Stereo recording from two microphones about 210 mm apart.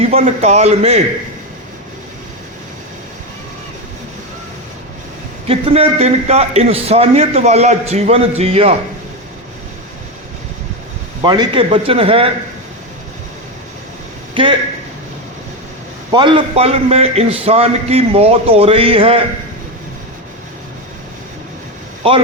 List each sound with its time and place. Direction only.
0.2 s a man's voice: 35° right (ahead or behind)
5.5 s a man's voice: 30° right (ahead or behind)
11.2 s a man's voice: 20° right (ahead or behind)
14.4 s a man's voice: 25° right (ahead or behind)
16.1 s a man's voice: 25° right (ahead or behind)